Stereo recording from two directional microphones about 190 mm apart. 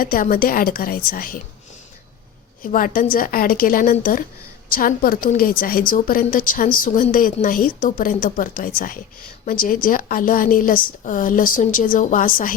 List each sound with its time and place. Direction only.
0.0 s a woman's voice: 50° left (ahead or behind)
2.6 s a woman's voice: 45° left (ahead or behind)